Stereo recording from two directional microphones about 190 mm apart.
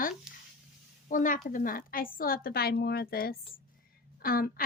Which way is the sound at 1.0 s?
45° left (ahead or behind).